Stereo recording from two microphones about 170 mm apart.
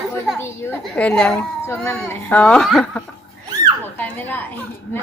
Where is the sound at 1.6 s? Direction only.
15° left (ahead or behind).